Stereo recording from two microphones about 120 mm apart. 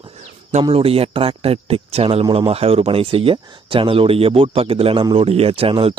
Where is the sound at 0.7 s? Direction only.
55° right (ahead or behind).